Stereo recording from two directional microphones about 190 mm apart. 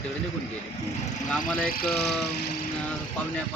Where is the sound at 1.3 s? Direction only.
5° left (ahead or behind).